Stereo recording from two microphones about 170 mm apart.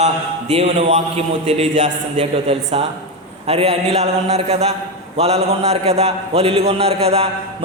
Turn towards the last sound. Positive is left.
turn(degrees=-35)  # may be behind; listen again after turning